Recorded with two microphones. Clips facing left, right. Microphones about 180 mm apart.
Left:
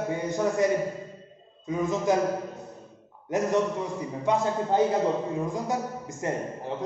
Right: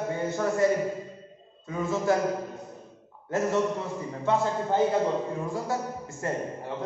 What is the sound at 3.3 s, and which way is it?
A man's voice, 15° left (ahead or behind).